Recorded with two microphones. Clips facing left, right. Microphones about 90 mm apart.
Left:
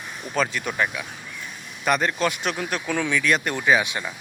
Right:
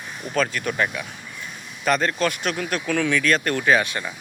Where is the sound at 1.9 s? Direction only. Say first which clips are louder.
Right 1 dB; 15° left (ahead or behind).